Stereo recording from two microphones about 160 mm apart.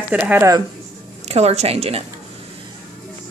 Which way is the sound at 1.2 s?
40° right (ahead or behind).